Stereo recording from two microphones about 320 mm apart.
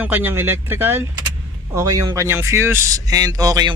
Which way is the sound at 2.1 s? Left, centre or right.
Centre.